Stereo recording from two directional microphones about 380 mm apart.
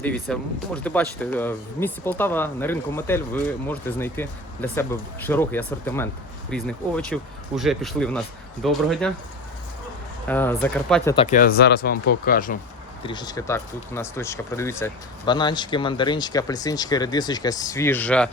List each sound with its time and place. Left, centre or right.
0.0 s speech: centre
10.2 s speech: centre
11.1 s speech: centre